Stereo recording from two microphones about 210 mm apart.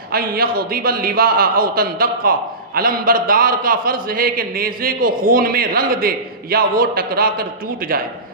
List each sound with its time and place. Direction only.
0.1 s a man's voice: 45° right (ahead or behind)